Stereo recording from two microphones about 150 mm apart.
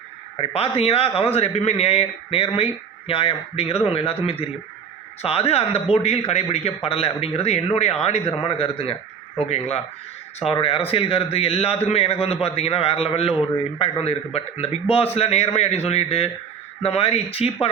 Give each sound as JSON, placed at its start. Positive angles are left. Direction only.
{"t": 0.3, "sound": "a man's voice", "side_deg": 40}